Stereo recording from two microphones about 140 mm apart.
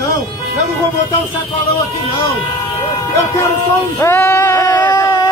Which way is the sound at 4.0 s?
15° left (ahead or behind).